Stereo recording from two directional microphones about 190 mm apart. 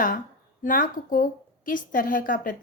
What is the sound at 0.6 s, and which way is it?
A woman's voice, 45° left (ahead or behind).